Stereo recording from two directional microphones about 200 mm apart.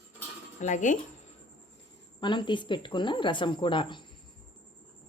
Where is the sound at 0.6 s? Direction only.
40° left (ahead or behind).